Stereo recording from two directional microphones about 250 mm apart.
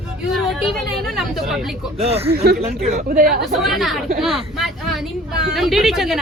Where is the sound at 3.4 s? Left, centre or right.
Centre.